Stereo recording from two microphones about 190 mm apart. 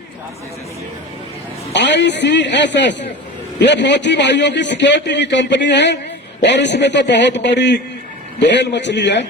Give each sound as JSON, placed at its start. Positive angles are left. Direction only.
{"t": 1.7, "sound": "a man's voice", "side_deg": 70}